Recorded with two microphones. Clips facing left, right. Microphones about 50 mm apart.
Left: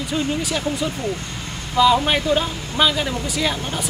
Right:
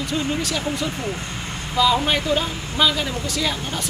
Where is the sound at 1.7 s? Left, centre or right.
Centre.